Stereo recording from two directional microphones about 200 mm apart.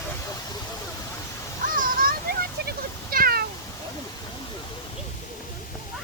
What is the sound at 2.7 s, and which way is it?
Cat, 45° right (ahead or behind).